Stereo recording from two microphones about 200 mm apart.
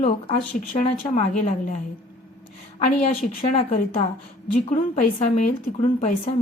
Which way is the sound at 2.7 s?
35° left (ahead or behind).